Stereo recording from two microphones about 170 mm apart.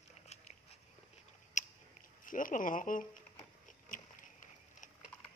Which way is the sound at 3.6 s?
50° left (ahead or behind).